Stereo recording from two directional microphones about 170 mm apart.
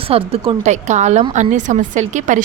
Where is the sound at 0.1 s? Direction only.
35° right (ahead or behind).